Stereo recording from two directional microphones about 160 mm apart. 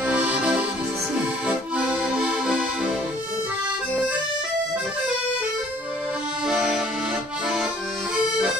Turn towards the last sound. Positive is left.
turn(degrees=-5)  # may be behind; listen again after turning